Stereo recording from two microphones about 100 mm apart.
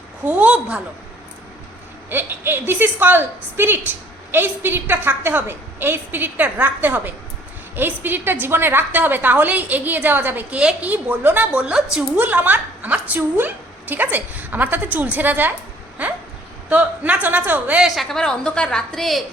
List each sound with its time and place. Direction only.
0.3 s a woman's voice: 15° right (ahead or behind)
2.0 s a woman's voice: 20° right (ahead or behind)
17.8 s a woman's voice: centre (ahead or behind)